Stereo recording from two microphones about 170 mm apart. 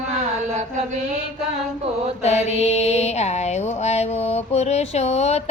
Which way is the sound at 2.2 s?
40° left (ahead or behind).